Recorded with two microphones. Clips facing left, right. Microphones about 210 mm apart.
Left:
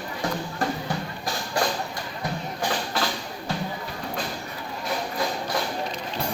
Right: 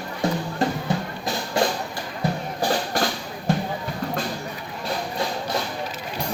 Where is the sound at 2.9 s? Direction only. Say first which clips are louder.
Right 3 dB; 45° right (ahead or behind).